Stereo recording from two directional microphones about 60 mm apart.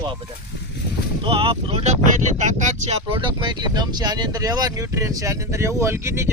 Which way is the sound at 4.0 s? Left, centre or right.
Right.